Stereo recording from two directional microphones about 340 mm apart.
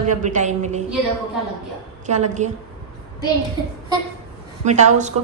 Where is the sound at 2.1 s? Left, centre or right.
Centre.